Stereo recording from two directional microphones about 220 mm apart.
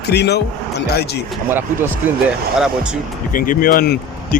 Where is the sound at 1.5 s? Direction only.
10° right (ahead or behind).